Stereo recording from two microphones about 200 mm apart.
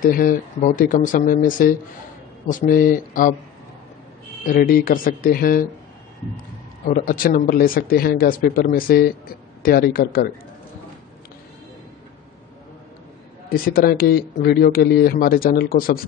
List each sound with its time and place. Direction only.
0.0 s speech: 45° left (ahead or behind)
4.5 s speech: 45° left (ahead or behind)
6.9 s speech: 45° left (ahead or behind)
13.5 s speech: 45° left (ahead or behind)